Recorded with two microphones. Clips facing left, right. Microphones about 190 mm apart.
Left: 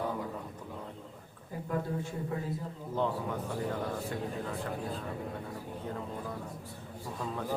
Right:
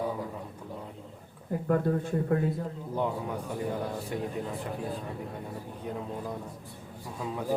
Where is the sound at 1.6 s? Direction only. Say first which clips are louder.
Right 7 dB; 60° right (ahead or behind).